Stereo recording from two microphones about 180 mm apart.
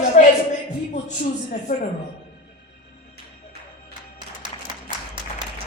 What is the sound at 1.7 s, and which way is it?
Speech, 50° left (ahead or behind).